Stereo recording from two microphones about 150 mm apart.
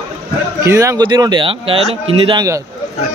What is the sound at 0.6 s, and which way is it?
Speech, 20° right (ahead or behind).